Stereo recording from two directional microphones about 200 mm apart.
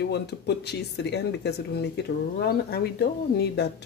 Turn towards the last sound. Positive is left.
turn(degrees=55)  # may be behind; listen again after turning